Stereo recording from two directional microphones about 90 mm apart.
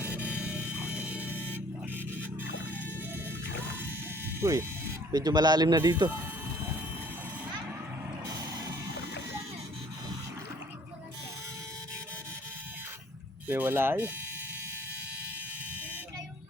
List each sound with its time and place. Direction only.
0.0 s music: 15° right (ahead or behind)
4.4 s speech: 35° right (ahead or behind)
5.1 s speech: 45° right (ahead or behind)
13.5 s speech: 25° right (ahead or behind)